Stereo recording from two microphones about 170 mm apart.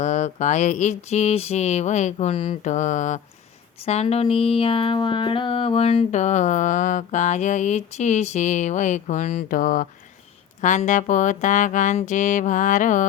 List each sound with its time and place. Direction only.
0.0 s speech: 45° left (ahead or behind)